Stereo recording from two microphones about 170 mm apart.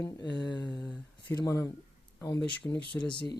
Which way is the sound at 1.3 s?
15° left (ahead or behind).